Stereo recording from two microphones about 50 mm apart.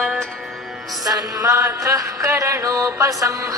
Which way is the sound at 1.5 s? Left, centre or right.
Right.